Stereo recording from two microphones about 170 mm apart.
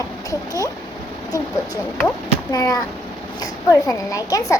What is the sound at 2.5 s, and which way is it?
A child's voice, 20° left (ahead or behind).